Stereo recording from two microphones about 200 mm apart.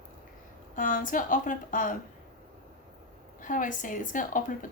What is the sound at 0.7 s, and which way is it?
A woman's voice, 40° left (ahead or behind).